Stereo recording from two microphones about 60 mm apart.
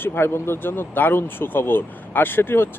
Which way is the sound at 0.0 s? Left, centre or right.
Left.